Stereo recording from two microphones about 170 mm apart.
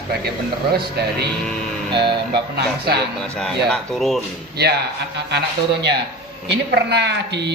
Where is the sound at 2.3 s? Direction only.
75° right (ahead or behind).